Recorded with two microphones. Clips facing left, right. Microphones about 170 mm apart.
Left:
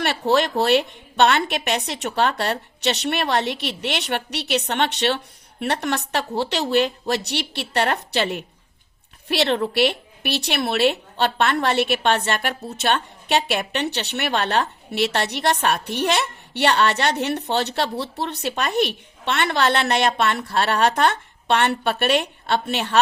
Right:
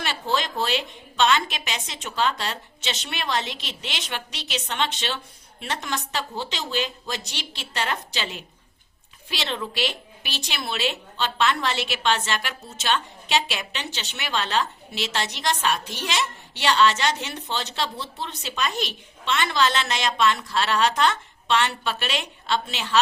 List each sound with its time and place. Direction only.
0.0 s a woman's voice: 65° left (ahead or behind)